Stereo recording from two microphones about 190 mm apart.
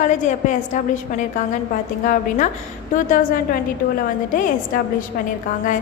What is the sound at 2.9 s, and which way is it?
Speech, 45° left (ahead or behind).